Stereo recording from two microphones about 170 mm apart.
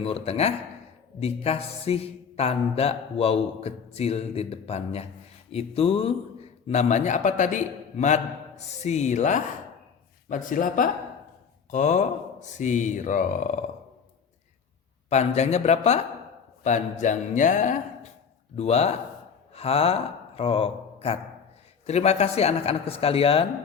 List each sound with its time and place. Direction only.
0.0 s a man's voice: 35° left (ahead or behind)
15.1 s a man's voice: 40° left (ahead or behind)